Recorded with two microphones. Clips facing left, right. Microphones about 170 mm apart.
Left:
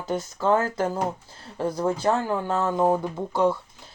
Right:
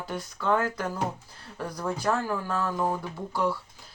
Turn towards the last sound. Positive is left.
turn(degrees=20)  # may be behind; listen again after turning